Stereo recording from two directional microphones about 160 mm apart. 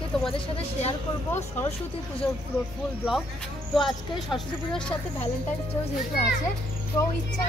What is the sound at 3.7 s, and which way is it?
Speech, centre (ahead or behind).